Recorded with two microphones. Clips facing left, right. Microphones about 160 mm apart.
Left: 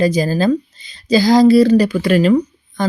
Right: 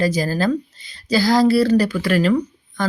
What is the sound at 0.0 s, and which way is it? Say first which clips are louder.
Speech: left 4 dB; 20° left (ahead or behind).